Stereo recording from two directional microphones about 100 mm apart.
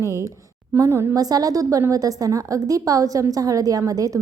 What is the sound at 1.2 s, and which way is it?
A woman's voice, 40° right (ahead or behind).